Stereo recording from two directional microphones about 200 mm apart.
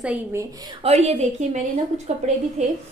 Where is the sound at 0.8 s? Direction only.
30° right (ahead or behind).